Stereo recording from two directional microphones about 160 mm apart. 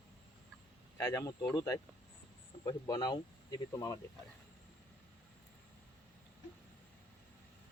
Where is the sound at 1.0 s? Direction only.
20° left (ahead or behind).